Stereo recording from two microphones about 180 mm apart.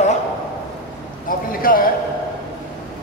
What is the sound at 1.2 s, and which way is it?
Speech, 50° left (ahead or behind).